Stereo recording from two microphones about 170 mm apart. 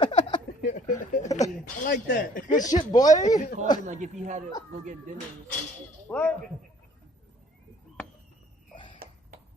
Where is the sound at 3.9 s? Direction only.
45° right (ahead or behind).